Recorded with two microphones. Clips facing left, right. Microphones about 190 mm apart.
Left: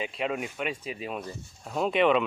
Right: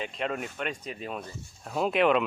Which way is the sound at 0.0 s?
5° left (ahead or behind).